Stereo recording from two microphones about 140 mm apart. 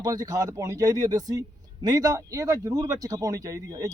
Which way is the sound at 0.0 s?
25° right (ahead or behind).